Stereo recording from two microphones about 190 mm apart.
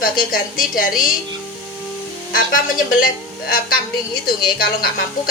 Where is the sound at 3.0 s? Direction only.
50° left (ahead or behind).